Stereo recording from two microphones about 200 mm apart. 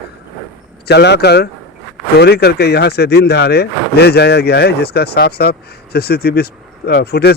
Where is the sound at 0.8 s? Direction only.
55° left (ahead or behind).